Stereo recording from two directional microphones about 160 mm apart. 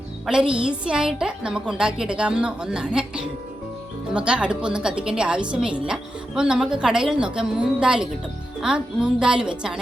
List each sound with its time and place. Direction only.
0.3 s a woman's voice: 5° right (ahead or behind)
4.1 s a woman's voice: 5° right (ahead or behind)